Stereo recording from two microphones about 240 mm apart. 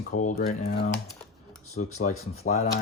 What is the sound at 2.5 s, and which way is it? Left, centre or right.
Speech, left.